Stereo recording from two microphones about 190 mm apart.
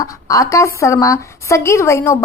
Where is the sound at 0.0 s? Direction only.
15° left (ahead or behind).